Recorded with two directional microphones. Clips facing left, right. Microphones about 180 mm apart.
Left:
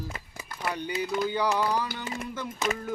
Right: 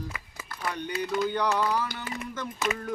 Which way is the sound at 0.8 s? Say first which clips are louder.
Right 1 dB; 5° left (ahead or behind).